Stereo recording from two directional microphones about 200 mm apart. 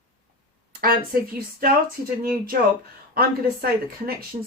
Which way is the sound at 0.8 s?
45° right (ahead or behind).